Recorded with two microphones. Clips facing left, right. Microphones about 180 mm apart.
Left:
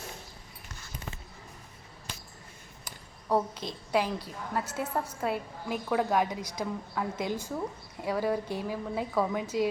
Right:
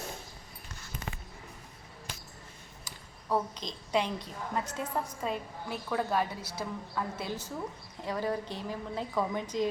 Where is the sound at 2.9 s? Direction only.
60° left (ahead or behind).